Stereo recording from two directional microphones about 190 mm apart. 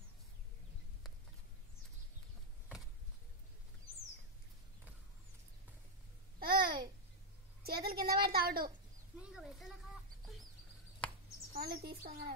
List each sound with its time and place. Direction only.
6.4 s babbling: 50° right (ahead or behind)
7.6 s a woman's voice: 55° right (ahead or behind)
9.3 s a sound: centre (ahead or behind)
11.5 s a woman's voice: 55° right (ahead or behind)